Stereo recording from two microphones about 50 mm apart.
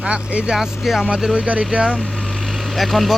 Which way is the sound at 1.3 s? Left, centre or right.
Right.